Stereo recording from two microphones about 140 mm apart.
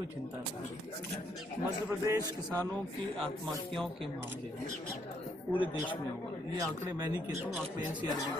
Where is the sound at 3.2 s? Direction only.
Centre (ahead or behind).